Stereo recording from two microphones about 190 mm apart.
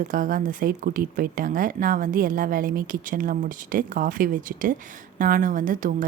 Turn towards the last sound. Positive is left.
turn(degrees=-45)  # may be behind; listen again after turning